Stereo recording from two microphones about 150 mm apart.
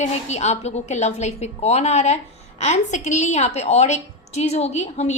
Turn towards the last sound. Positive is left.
turn(degrees=50)  # may be behind; listen again after turning